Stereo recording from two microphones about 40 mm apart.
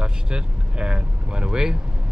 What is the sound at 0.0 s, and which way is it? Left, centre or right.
Vehicle, right.